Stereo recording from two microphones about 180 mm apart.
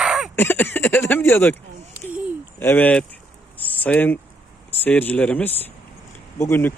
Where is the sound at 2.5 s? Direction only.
10° left (ahead or behind).